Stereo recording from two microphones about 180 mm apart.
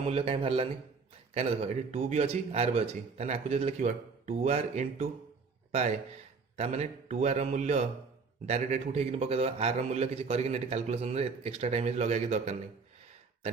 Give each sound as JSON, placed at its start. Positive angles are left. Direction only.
{"t": 0.1, "sound": "a man's voice", "side_deg": -30}
{"t": 6.6, "sound": "a man's voice", "side_deg": -35}